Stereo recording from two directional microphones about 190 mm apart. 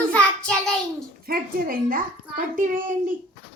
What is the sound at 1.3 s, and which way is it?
A woman's voice, 50° right (ahead or behind).